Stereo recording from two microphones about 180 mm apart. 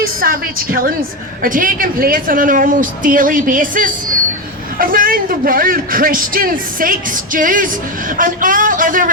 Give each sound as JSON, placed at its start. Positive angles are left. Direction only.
{"t": 0.0, "sound": "a woman's voice", "side_deg": -55}